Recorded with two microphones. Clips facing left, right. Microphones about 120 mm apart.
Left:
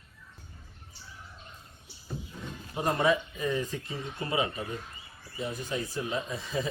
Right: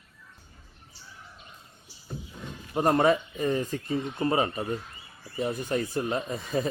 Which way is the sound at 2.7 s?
50° right (ahead or behind).